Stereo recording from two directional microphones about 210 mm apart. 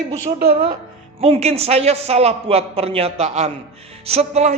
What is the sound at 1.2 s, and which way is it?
A man's voice, 30° right (ahead or behind).